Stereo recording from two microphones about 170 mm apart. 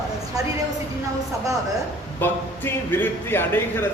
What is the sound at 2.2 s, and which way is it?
A man's voice, 10° left (ahead or behind).